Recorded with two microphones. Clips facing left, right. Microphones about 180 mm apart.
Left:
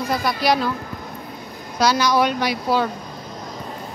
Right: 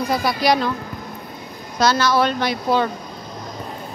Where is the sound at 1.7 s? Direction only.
10° left (ahead or behind).